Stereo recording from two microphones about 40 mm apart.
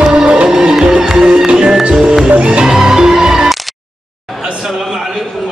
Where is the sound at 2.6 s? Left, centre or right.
Centre.